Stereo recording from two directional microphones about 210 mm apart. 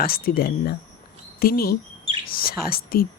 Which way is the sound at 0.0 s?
45° left (ahead or behind).